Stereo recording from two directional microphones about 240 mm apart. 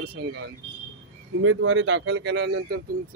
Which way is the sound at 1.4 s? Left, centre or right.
Right.